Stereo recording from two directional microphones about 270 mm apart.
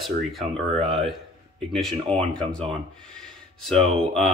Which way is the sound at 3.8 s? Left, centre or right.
Right.